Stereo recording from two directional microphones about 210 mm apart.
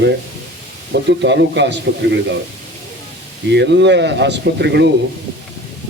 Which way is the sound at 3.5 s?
55° right (ahead or behind).